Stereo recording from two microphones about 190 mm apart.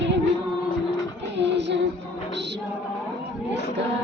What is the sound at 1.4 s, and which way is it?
Music, 65° right (ahead or behind).